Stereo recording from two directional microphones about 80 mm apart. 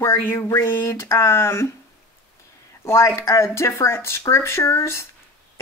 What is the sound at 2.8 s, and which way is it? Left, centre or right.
Speech, left.